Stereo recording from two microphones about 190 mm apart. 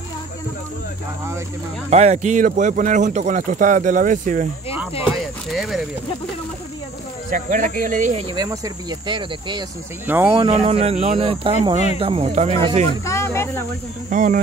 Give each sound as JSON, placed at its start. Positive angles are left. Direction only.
{"t": 1.9, "sound": "speech", "side_deg": -35}
{"t": 5.1, "sound": "speech", "side_deg": 0}
{"t": 7.2, "sound": "speech", "side_deg": -45}
{"t": 8.4, "sound": "speech", "side_deg": -20}
{"t": 10.0, "sound": "speech", "side_deg": -10}
{"t": 10.4, "sound": "speech", "side_deg": -30}
{"t": 13.0, "sound": "speech", "side_deg": 15}
{"t": 14.1, "sound": "speech", "side_deg": -40}